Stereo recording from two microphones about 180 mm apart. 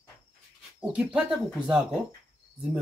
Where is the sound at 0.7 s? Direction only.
5° right (ahead or behind).